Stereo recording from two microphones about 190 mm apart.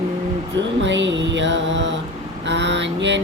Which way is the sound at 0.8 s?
75° right (ahead or behind).